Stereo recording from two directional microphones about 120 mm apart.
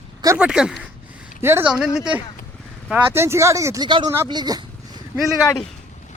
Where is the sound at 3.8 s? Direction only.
35° right (ahead or behind).